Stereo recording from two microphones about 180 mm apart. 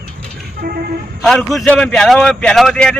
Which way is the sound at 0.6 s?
55° right (ahead or behind).